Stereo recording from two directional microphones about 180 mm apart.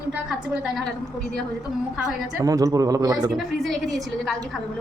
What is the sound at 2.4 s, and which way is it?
Speech, 20° right (ahead or behind).